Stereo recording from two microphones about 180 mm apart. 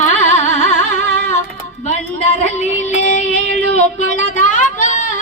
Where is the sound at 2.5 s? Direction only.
40° left (ahead or behind).